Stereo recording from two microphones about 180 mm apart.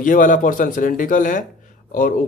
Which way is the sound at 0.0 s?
45° left (ahead or behind).